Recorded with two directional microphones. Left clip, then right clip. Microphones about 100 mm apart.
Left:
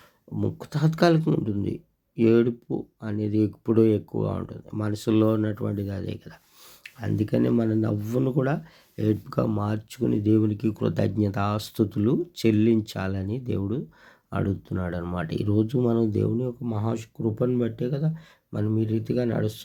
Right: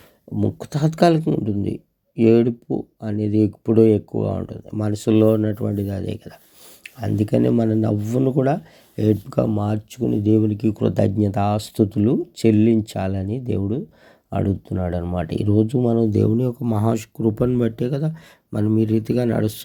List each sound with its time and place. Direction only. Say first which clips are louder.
0.3 s speech: right 6 dB; 35° right (ahead or behind)
1.2 s speech: right 3 dB; 5° right (ahead or behind)
1.5 s speech: right 5 dB; 20° right (ahead or behind)
7.2 s speech: right 5 dB; 50° right (ahead or behind)
9.6 s speech: right 5 dB; 25° right (ahead or behind)
9.9 s speech: right 4 dB; 5° right (ahead or behind); by 16.0 s 25° right (ahead or behind)
16.9 s speech: right 7 dB; 90° right; by 19.6 s 70° right (ahead or behind)